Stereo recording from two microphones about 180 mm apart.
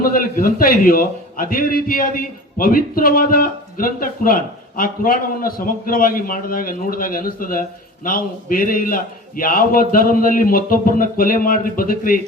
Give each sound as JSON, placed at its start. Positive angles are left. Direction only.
{"t": 0.0, "sound": "a man's voice", "side_deg": 50}